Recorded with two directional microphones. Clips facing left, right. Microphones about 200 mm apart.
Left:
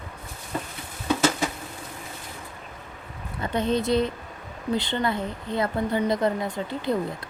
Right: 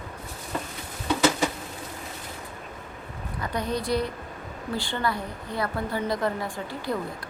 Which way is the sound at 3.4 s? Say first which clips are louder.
Left 5 dB; 25° left (ahead or behind).